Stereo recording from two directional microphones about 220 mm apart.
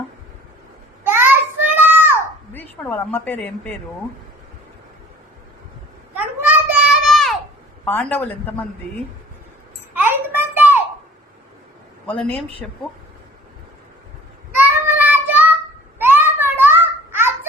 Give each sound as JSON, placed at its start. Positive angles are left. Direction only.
{"t": 1.0, "sound": "child singing", "side_deg": -10}
{"t": 2.5, "sound": "a woman's voice", "side_deg": 10}
{"t": 6.7, "sound": "children playing", "side_deg": 0}
{"t": 7.9, "sound": "speech", "side_deg": 10}
{"t": 9.9, "sound": "a sound", "side_deg": -10}
{"t": 12.0, "sound": "speech", "side_deg": 5}
{"t": 14.6, "sound": "child singing", "side_deg": -10}
{"t": 16.0, "sound": "babbling", "side_deg": -10}